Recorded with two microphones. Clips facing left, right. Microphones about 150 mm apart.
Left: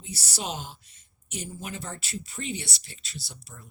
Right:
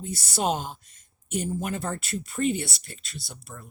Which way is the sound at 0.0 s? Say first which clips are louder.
Right 8 dB; 50° right (ahead or behind).